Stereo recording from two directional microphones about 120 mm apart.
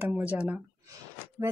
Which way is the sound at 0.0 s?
15° right (ahead or behind).